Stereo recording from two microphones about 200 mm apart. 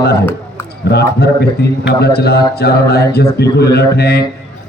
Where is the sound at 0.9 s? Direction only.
55° left (ahead or behind).